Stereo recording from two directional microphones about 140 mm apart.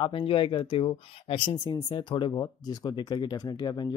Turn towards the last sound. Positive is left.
turn(degrees=30)  # may be behind; listen again after turning